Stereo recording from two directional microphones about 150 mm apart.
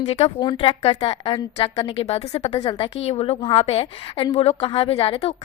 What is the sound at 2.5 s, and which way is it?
A woman's voice, 30° left (ahead or behind).